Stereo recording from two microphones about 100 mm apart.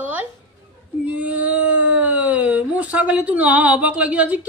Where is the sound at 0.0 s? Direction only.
15° right (ahead or behind).